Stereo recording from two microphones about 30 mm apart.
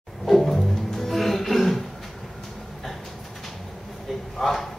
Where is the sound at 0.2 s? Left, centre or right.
Centre.